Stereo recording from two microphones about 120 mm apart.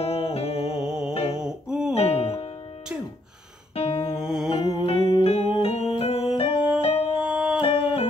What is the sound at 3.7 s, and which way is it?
Music, 60° left (ahead or behind).